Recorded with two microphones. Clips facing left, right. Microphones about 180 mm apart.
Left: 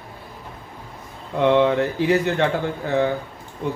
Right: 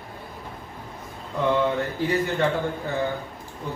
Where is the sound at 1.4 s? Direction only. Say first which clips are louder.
Left 6 dB; 80° left.